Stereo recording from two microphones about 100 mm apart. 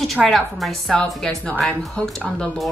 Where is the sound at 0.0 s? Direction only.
Centre (ahead or behind).